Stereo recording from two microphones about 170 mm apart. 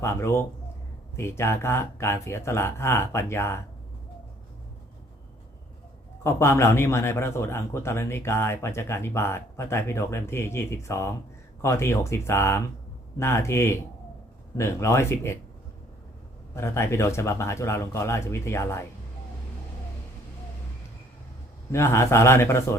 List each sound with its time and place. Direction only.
0.0 s a man's voice: 15° left (ahead or behind)
6.2 s a man's voice: 15° left (ahead or behind)
16.6 s a man's voice: 15° left (ahead or behind)
21.7 s a man's voice: 15° left (ahead or behind)